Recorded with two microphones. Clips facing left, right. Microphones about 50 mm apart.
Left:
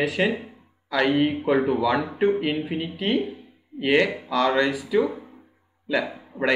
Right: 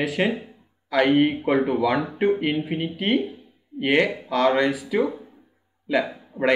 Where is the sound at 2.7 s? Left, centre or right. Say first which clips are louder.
Right 2 dB; right.